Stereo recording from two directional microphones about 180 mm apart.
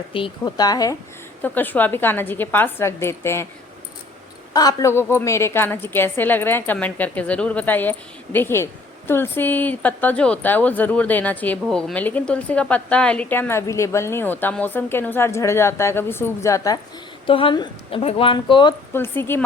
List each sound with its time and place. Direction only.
0.1 s a woman's voice: 25° left (ahead or behind)
1.4 s a woman's voice: 10° left (ahead or behind)
4.5 s a woman's voice: 20° left (ahead or behind)
17.2 s a woman's voice: 30° left (ahead or behind)
18.9 s a woman's voice: 10° left (ahead or behind)